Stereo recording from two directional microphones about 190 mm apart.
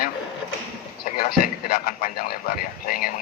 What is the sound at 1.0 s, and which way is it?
Speech, 50° left (ahead or behind).